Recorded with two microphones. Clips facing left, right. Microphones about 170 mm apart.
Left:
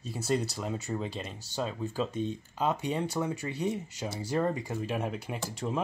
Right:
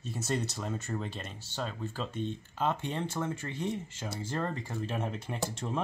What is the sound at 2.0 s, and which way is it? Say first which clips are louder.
Speech: left 3 dB; 40° left (ahead or behind).